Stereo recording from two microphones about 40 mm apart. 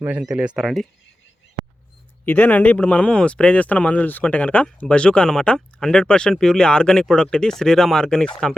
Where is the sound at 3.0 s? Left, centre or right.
Left.